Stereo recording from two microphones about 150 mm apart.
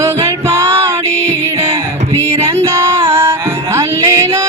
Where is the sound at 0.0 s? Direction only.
20° right (ahead or behind).